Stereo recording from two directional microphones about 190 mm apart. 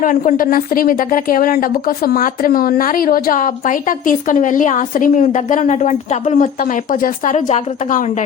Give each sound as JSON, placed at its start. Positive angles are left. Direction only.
{"t": 0.0, "sound": "a woman's voice", "side_deg": 45}